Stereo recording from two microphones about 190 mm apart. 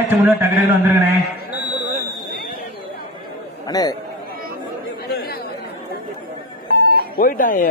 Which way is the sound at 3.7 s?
20° left (ahead or behind).